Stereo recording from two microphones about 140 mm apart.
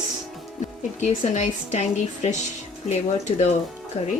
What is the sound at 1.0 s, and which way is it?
A woman's voice, 55° left (ahead or behind).